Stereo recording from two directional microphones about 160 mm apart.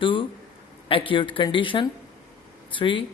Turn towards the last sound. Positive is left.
turn(degrees=30)  # may be behind; listen again after turning